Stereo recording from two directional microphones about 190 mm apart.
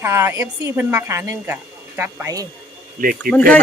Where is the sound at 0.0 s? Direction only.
15° right (ahead or behind).